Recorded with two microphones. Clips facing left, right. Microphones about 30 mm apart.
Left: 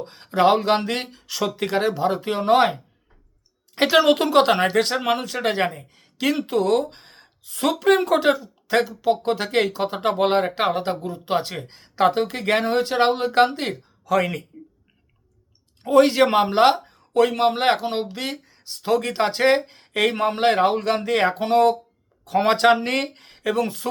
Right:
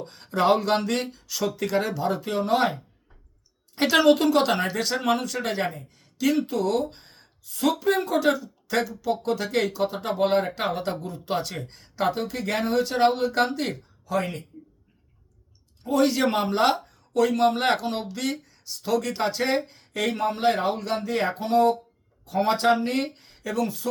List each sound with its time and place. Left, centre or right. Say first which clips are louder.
0.0 s speech: left 5 dB; left
1.3 s speech: left 3 dB; left
3.8 s speech: left 2 dB; left
4.9 s speech: left 2 dB; left
8.2 s speech: left 3 dB; left
11.9 s speech: left 6 dB; left
14.0 s speech: left 6 dB; left
15.8 s speech: left 6 dB; left
16.3 s speech: left 6 dB; left